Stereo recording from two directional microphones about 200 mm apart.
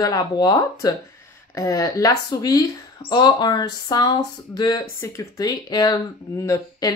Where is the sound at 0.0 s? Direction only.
20° left (ahead or behind).